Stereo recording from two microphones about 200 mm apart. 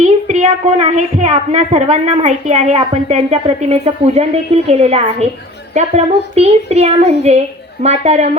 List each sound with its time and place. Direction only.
0.0 s a woman's voice: 35° right (ahead or behind)